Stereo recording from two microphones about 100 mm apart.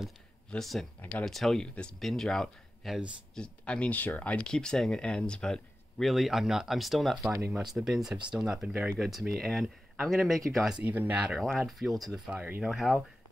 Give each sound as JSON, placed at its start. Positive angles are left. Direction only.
{"t": 0.5, "sound": "speech", "side_deg": 5}
{"t": 10.8, "sound": "speech", "side_deg": -15}
{"t": 11.3, "sound": "speech", "side_deg": 0}
{"t": 12.4, "sound": "speech", "side_deg": -15}
{"t": 12.7, "sound": "speech", "side_deg": 0}